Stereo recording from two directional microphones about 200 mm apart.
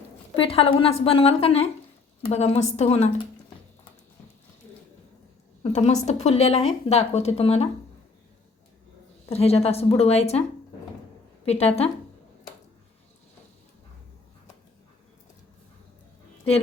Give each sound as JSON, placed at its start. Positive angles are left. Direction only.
{"t": 0.3, "sound": "a woman's voice", "side_deg": 30}
{"t": 5.6, "sound": "a woman's voice", "side_deg": 35}
{"t": 9.3, "sound": "a woman's voice", "side_deg": 30}
{"t": 11.4, "sound": "a woman's voice", "side_deg": 30}